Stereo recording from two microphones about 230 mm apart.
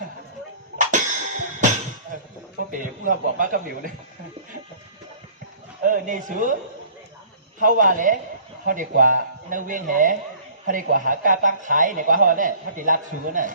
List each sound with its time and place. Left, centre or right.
0.9 s music: right
2.8 s a man's voice: right
5.9 s a man's voice: right
7.6 s a man's voice: right